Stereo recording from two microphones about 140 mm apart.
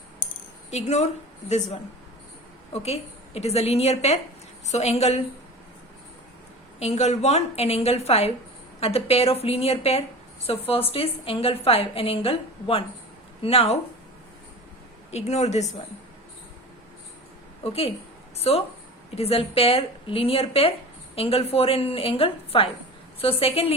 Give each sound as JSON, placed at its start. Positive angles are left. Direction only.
{"t": 0.7, "sound": "a woman's voice", "side_deg": 50}
{"t": 6.7, "sound": "a woman's voice", "side_deg": 50}
{"t": 15.1, "sound": "a woman's voice", "side_deg": 50}
{"t": 17.6, "sound": "a woman's voice", "side_deg": 45}